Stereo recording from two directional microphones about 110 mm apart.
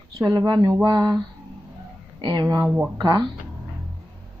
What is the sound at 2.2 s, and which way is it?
Speech, 40° right (ahead or behind).